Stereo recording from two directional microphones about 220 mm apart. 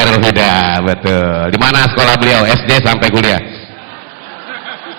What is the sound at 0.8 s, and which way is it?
A man's voice, 25° right (ahead or behind).